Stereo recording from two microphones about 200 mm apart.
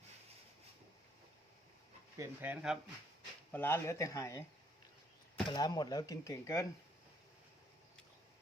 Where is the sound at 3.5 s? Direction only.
10° left (ahead or behind).